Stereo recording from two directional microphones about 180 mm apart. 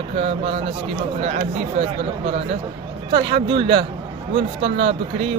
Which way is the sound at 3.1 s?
30° right (ahead or behind).